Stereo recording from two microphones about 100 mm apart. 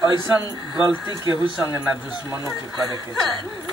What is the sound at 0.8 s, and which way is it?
Speech, 45° right (ahead or behind).